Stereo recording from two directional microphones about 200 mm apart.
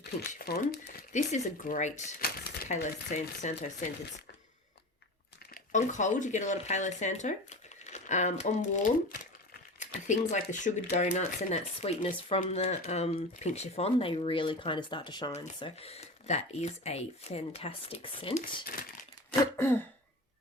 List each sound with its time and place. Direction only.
0.0 s speech: 50° left (ahead or behind)
5.7 s speech: 40° left (ahead or behind)
10.1 s speech: 40° left (ahead or behind)
19.5 s throat clearing: 10° left (ahead or behind)